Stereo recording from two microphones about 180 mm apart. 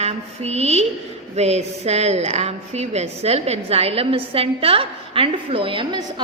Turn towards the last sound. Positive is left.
turn(degrees=-25)  # may be behind; listen again after turning